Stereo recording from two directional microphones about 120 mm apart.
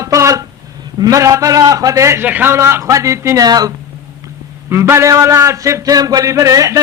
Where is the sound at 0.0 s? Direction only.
25° right (ahead or behind).